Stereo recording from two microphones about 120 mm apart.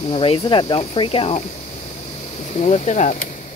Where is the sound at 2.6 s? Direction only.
75° left (ahead or behind).